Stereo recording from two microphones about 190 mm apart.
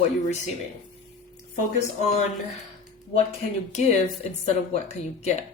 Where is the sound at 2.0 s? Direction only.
35° left (ahead or behind).